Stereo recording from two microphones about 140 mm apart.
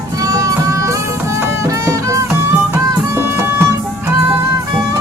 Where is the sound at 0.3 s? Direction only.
25° right (ahead or behind).